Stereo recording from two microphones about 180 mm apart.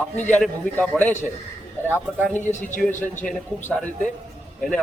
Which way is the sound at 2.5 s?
45° left (ahead or behind).